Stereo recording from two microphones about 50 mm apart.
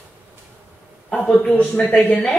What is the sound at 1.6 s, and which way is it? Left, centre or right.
Speech, left.